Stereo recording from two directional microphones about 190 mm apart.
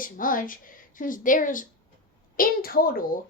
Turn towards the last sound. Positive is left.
turn(degrees=50)  # may be behind; listen again after turning